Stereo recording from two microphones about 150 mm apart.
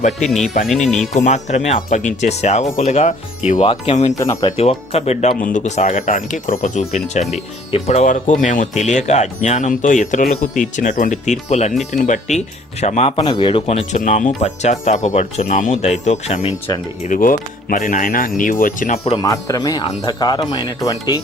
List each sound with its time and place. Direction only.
1.1 s speech: 50° left (ahead or behind)
3.6 s speech: 35° left (ahead or behind)
4.2 s speech: 25° left (ahead or behind)
4.5 s speech: 45° left (ahead or behind)
5.4 s speech: 60° left (ahead or behind)
12.8 s speech: 45° left (ahead or behind)
13.2 s speech: 30° left (ahead or behind)
13.7 s speech: 50° left (ahead or behind)
17.0 s speech: 65° left (ahead or behind)
19.2 s speech: 20° left (ahead or behind)